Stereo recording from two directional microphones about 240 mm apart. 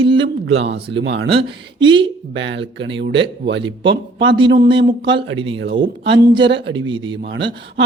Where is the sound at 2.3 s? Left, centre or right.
Right.